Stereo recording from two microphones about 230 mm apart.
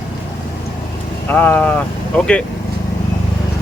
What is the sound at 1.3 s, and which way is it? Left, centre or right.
Speech, centre.